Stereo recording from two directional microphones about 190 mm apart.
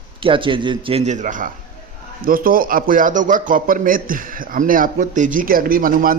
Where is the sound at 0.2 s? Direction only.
25° right (ahead or behind).